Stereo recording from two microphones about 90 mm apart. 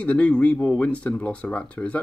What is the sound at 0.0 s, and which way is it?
Speech, 15° left (ahead or behind).